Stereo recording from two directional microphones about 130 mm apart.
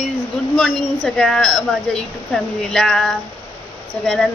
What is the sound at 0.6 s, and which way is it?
A woman's voice, 5° left (ahead or behind).